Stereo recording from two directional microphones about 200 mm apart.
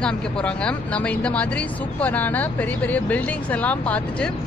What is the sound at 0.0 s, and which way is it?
Speech, 5° left (ahead or behind).